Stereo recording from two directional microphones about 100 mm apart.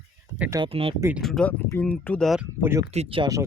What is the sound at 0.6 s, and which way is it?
Speech, 70° right (ahead or behind).